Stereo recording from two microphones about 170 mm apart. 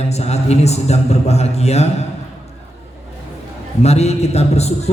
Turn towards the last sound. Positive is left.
turn(degrees=40)  # may be behind; listen again after turning